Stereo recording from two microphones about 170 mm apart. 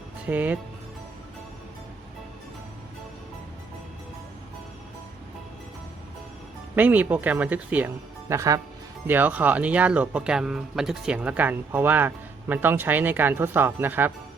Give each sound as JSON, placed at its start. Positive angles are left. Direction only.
{"t": 0.3, "sound": "speech", "side_deg": -10}
{"t": 6.7, "sound": "speech", "side_deg": -10}